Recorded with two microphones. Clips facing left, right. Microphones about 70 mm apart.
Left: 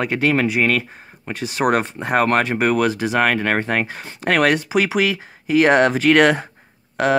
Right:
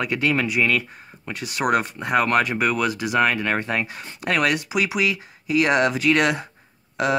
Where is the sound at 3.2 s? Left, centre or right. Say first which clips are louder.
Left 2 dB; left.